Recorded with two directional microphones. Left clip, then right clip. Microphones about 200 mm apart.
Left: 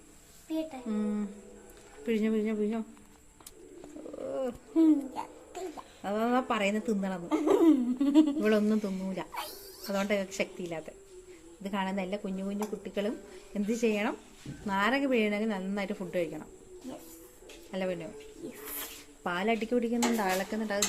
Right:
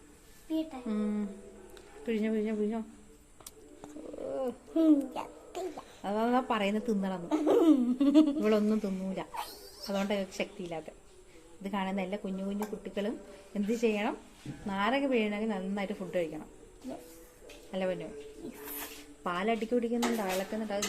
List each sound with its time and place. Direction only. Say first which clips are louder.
0.7 s speech: left 1 dB; 5° right (ahead or behind)
2.0 s a woman's voice: left 2 dB; 15° left (ahead or behind)
4.3 s a sound: left 1 dB; 10° left (ahead or behind)
4.8 s a child's voice: left 1 dB; 25° right (ahead or behind)
6.0 s a woman's voice: even; 10° left (ahead or behind)
7.3 s hoot: left 1 dB; 15° right (ahead or behind)
8.4 s a woman's voice: left 1 dB; 15° left (ahead or behind)
9.9 s a woman's voice: left 2 dB; 15° left (ahead or behind)
17.7 s speech: even; 15° left (ahead or behind)
19.2 s a woman's voice: left 1 dB; 15° left (ahead or behind)